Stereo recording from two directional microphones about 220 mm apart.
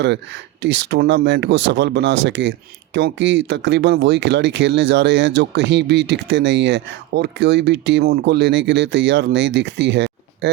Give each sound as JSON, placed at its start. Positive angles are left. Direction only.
{"t": 0.0, "sound": "speech", "side_deg": -55}